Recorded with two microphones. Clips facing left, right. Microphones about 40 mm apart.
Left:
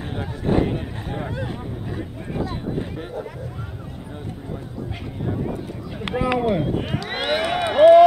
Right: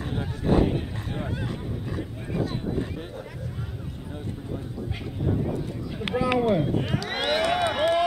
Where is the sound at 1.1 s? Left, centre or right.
Left.